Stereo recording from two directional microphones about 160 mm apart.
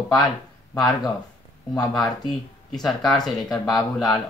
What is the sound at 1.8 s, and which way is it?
Speech, centre (ahead or behind).